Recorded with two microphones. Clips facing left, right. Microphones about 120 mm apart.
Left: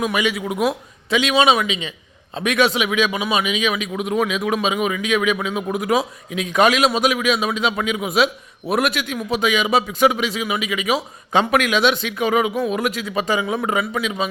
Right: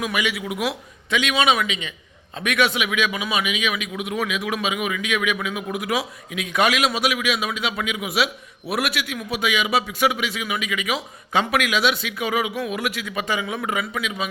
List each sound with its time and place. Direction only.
0.0 s a man's voice: 30° left (ahead or behind)
0.3 s a man's voice: 40° left (ahead or behind)
1.3 s a man's voice: 25° left (ahead or behind)
10.3 s a man's voice: 25° left (ahead or behind)
11.3 s a man's voice: 40° left (ahead or behind)